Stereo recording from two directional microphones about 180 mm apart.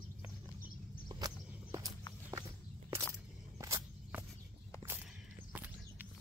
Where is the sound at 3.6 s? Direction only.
15° right (ahead or behind).